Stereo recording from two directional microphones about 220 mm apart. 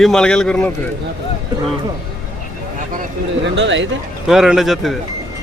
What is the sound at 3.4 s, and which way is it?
Speech, 55° right (ahead or behind).